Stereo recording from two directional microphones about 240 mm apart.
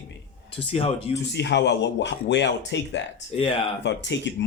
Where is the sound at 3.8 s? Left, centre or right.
Left.